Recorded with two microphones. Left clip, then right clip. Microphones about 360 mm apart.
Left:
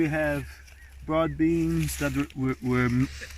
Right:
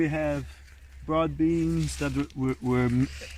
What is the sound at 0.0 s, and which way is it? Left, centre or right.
Speech, centre.